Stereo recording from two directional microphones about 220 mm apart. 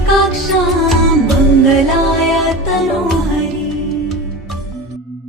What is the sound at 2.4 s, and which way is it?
Music, centre (ahead or behind).